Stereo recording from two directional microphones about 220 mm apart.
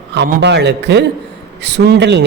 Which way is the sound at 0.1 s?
50° right (ahead or behind).